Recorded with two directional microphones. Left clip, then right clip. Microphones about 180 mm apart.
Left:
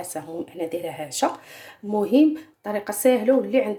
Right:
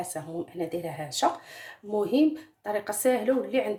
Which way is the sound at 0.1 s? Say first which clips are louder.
Left 3 dB; 20° left (ahead or behind).